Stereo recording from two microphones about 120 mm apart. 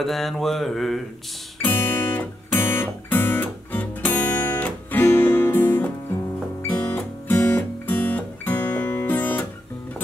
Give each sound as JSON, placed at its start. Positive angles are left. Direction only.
{"t": 0.0, "sound": "mantra", "side_deg": 0}
{"t": 1.6, "sound": "guitar", "side_deg": 15}
{"t": 6.7, "sound": "music", "side_deg": 15}